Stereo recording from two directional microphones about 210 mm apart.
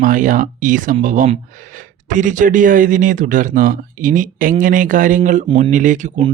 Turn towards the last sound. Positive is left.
turn(degrees=-35)  # may be behind; listen again after turning